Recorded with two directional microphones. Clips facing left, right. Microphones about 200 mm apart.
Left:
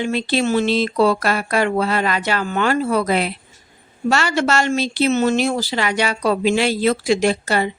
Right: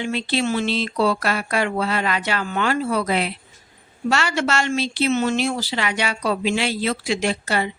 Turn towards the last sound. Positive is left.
turn(degrees=40)  # may be behind; listen again after turning